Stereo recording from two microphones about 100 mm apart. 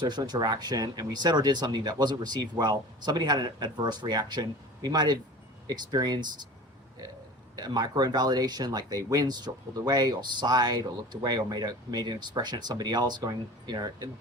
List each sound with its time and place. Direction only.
0.0 s speech: 45° right (ahead or behind)
7.5 s speech: 45° right (ahead or behind)